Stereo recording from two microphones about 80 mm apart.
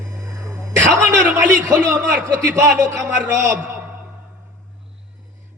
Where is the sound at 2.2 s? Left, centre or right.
Right.